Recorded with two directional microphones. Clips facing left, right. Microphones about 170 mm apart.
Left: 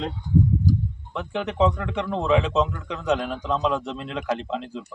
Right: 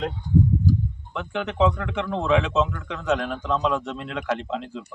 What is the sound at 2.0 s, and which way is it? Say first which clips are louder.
Speech: even; 25° left (ahead or behind).